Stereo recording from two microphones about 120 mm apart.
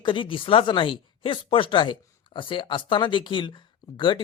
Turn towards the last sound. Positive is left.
turn(degrees=40)  # may be behind; listen again after turning